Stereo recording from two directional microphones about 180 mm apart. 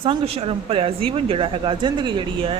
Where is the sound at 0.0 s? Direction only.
30° right (ahead or behind).